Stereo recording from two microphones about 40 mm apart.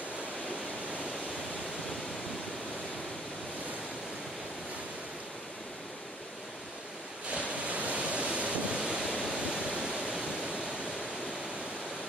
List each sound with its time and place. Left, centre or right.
7.2 s waves: right
9.5 s waterfall: right